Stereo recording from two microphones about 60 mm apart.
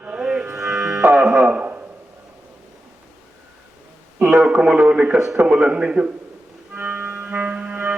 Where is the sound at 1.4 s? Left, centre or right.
Right.